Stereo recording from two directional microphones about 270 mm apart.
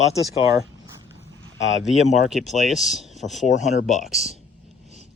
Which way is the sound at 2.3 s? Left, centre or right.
Centre.